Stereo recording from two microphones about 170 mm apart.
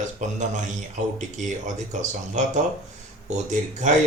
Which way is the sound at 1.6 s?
45° right (ahead or behind).